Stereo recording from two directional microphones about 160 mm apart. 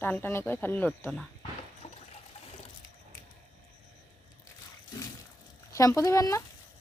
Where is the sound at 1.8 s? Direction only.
45° left (ahead or behind).